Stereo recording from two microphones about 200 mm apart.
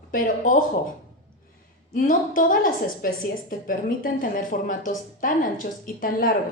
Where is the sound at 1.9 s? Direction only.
40° left (ahead or behind).